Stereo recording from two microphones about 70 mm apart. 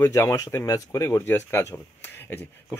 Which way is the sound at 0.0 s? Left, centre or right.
Left.